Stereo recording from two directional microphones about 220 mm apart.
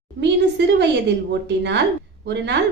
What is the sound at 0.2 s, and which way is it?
A woman's voice, 50° right (ahead or behind).